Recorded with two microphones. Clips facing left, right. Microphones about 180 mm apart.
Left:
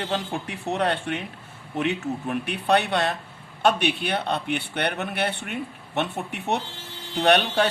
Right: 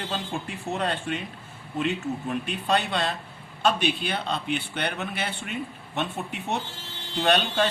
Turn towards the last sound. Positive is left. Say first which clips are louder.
# left 3 dB
turn(degrees=65)  # may be behind; listen again after turning